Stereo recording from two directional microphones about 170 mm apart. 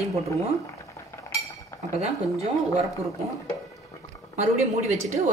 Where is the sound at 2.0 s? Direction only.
40° right (ahead or behind).